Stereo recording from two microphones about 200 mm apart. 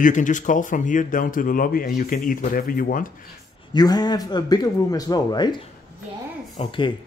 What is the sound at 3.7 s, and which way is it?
A man's voice, 20° left (ahead or behind).